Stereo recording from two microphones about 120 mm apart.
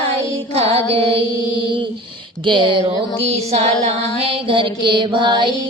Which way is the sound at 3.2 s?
60° right (ahead or behind).